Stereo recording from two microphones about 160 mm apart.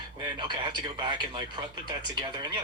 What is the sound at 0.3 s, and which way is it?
Speech, 30° right (ahead or behind).